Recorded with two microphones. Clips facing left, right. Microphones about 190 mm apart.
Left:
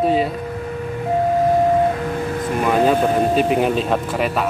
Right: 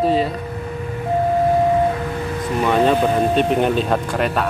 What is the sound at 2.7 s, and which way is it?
Speech, 5° left (ahead or behind).